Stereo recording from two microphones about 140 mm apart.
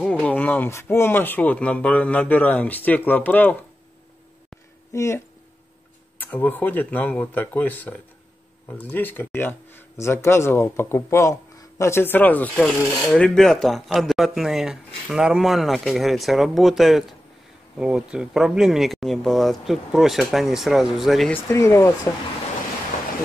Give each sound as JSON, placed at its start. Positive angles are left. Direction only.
{"t": 0.0, "sound": "speech", "side_deg": 10}
{"t": 4.9, "sound": "speech", "side_deg": 20}
{"t": 21.3, "sound": "speech", "side_deg": 15}